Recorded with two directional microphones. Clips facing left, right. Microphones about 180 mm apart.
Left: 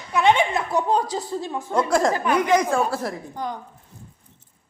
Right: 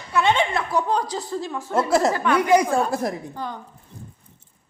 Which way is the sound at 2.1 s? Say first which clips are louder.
Right 1 dB; 15° left (ahead or behind).